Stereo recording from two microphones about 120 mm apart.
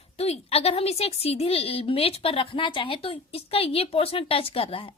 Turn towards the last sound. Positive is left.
turn(degrees=50)  # may be behind; listen again after turning